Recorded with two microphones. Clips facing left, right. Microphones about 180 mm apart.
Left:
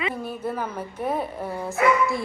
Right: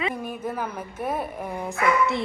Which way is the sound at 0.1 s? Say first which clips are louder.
Left 1 dB; 15° right (ahead or behind).